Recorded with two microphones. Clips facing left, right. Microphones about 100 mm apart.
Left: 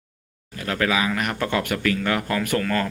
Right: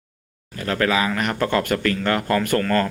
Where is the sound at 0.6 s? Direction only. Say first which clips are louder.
Right 2 dB; 10° left (ahead or behind).